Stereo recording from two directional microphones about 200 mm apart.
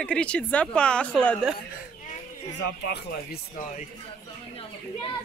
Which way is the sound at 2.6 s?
55° left (ahead or behind).